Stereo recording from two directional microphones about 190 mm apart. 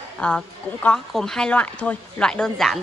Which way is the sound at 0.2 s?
5° left (ahead or behind).